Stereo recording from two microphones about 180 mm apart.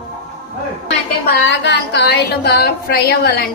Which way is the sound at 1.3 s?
80° left.